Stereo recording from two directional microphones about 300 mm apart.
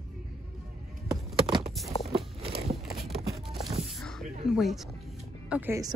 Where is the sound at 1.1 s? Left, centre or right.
Centre.